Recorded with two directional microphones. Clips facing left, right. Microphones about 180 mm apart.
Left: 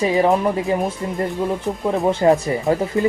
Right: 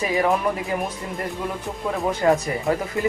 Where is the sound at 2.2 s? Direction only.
20° left (ahead or behind).